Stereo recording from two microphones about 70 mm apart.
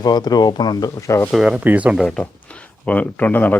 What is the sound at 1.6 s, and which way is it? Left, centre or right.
Speech, right.